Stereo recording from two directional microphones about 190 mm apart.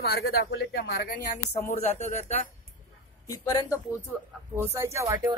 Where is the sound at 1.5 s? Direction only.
40° left (ahead or behind).